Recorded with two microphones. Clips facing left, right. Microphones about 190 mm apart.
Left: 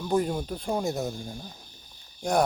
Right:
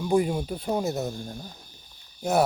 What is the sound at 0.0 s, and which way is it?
Speech, 10° right (ahead or behind).